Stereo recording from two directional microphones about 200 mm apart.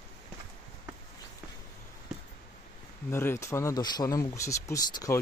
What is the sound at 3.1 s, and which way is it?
Speech, 10° left (ahead or behind).